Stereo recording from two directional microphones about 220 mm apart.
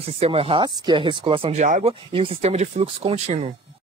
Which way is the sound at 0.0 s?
25° right (ahead or behind).